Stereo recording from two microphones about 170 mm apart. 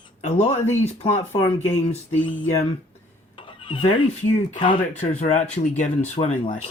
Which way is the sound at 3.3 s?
30° left (ahead or behind).